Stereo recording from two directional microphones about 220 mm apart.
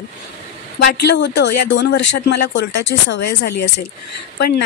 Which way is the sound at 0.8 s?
50° left (ahead or behind).